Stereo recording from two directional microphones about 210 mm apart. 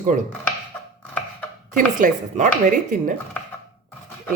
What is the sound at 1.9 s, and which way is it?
Speech, 35° right (ahead or behind).